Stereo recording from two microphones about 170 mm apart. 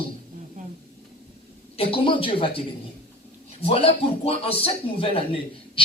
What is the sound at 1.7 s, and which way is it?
A man's voice, 35° left (ahead or behind).